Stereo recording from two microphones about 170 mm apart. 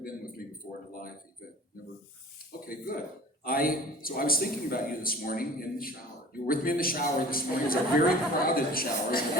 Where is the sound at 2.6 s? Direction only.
60° left (ahead or behind).